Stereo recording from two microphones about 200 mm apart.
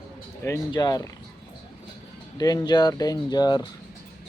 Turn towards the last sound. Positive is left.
turn(degrees=20)  # may be behind; listen again after turning